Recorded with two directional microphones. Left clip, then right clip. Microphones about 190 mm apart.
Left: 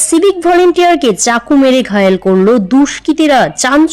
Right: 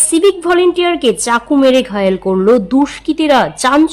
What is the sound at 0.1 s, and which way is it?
A woman's voice, 20° left (ahead or behind).